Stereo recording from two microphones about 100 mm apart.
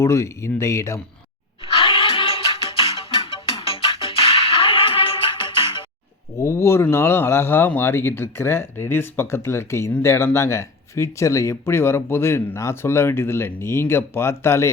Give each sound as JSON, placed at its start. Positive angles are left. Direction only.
{"t": 0.0, "sound": "speech", "side_deg": 30}
{"t": 1.6, "sound": "music", "side_deg": 60}
{"t": 6.4, "sound": "speech", "side_deg": 30}